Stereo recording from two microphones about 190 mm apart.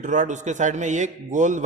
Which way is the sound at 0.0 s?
40° right (ahead or behind).